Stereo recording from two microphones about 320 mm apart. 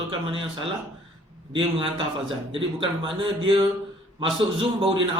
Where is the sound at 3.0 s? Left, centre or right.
Centre.